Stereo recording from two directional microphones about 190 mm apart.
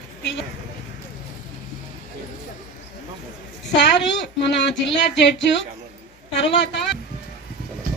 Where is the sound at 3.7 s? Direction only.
70° left (ahead or behind).